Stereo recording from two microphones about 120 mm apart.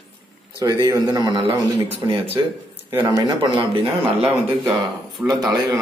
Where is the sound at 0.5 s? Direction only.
30° right (ahead or behind).